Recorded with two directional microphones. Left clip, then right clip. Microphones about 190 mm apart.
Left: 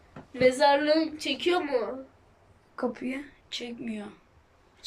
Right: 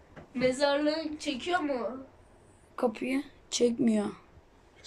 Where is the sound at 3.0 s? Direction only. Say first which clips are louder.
Right 3 dB; 15° right (ahead or behind).